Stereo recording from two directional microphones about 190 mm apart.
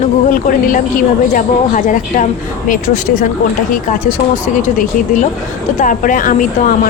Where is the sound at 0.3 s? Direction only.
45° left (ahead or behind).